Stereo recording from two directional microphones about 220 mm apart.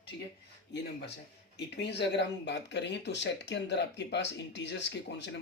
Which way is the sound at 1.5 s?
50° left (ahead or behind).